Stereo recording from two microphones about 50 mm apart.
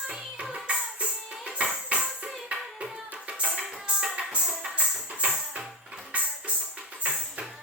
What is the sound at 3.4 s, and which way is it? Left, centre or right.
Music, right.